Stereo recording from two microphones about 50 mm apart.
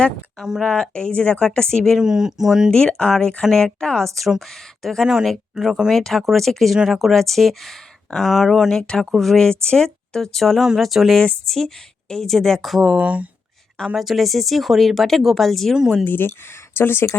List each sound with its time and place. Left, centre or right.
0.6 s speech: centre
2.0 s speech: centre
2.6 s speech: centre
4.4 s speech: centre
5.5 s speech: centre
5.9 s speech: centre
8.7 s speech: centre
9.1 s speech: centre
9.4 s speech: centre
13.0 s speech: right
13.9 s speech: centre
16.0 s speech: left